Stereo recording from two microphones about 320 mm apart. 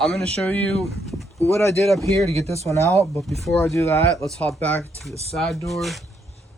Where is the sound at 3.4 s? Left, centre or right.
Centre.